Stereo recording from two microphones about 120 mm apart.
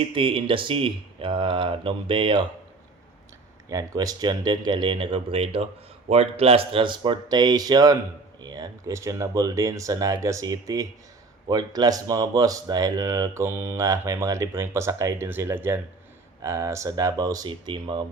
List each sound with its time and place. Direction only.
0.0 s speech: 45° right (ahead or behind)
3.7 s speech: 30° right (ahead or behind)
17.7 s speech: 45° right (ahead or behind)